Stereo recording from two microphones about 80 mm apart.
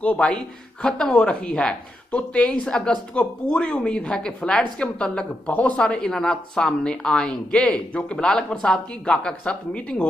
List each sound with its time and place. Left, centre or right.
0.0 s a woman's voice: centre